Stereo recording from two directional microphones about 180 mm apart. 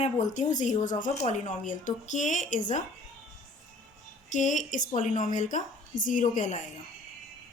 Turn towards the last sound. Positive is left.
turn(degrees=45)  # may be behind; listen again after turning